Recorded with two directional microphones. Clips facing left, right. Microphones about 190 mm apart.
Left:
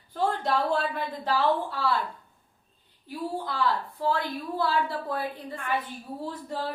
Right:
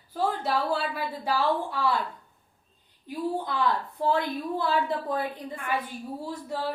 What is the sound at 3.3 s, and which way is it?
A woman's voice, 20° right (ahead or behind).